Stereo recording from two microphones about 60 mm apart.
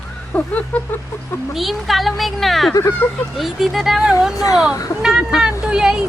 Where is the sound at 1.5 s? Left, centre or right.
Centre.